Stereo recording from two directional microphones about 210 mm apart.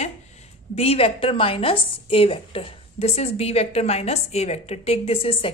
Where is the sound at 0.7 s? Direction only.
30° left (ahead or behind).